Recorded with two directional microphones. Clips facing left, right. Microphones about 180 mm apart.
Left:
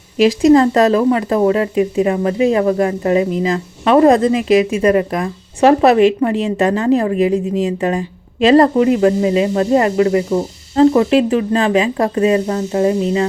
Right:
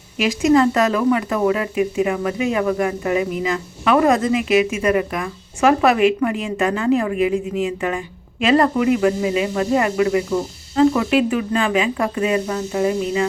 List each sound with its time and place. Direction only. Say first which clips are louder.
0.2 s speech: left 5 dB; 35° left (ahead or behind)